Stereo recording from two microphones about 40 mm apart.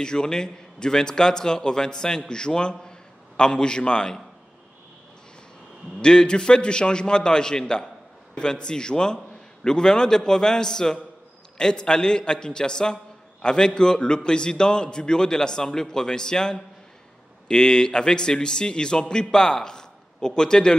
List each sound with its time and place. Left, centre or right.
0.0 s a man's voice: centre
5.9 s a man's voice: left